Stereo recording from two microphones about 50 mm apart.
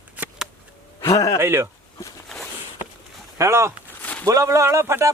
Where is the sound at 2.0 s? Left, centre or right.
Left.